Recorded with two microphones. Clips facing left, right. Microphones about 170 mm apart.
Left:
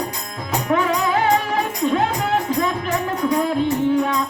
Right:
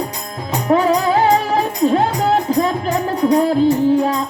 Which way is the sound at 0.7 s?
35° right (ahead or behind).